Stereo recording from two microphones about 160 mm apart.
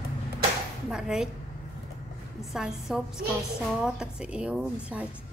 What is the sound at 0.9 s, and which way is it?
Speech, 5° right (ahead or behind).